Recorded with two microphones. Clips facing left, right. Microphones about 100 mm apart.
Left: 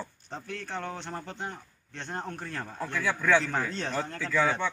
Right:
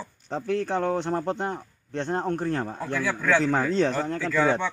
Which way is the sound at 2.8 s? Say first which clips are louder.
Right 3 dB; 5° right (ahead or behind).